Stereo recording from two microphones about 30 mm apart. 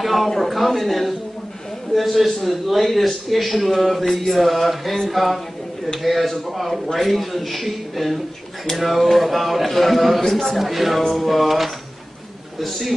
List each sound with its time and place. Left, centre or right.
0.0 s a man's voice: centre
11.0 s a man's voice: centre